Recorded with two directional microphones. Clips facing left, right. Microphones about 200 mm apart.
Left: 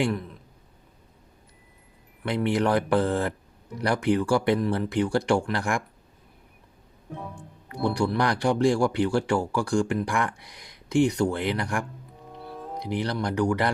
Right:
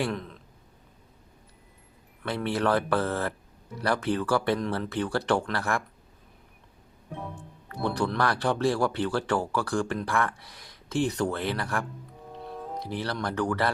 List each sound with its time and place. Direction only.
2.2 s speech: 15° left (ahead or behind)
7.7 s speech: 10° left (ahead or behind)